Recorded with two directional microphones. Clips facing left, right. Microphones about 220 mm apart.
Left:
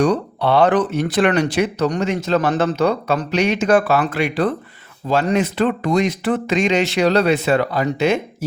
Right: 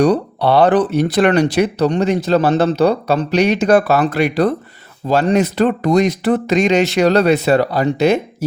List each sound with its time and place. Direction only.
0.0 s speech: 35° right (ahead or behind)